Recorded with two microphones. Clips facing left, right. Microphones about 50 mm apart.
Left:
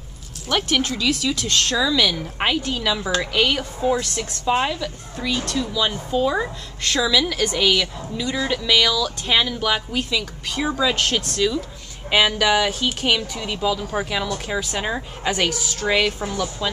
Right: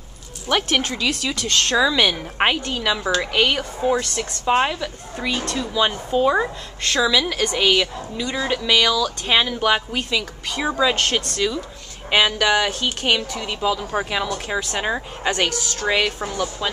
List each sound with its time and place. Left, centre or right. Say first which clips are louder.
0.5 s speech: right 1 dB; centre
2.6 s a woman's voice: right 1 dB; centre
15.5 s a woman's voice: right 1 dB; centre
15.9 s a woman's voice: left 1 dB; centre